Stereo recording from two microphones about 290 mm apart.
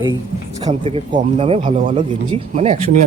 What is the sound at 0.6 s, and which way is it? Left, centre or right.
Speech, centre.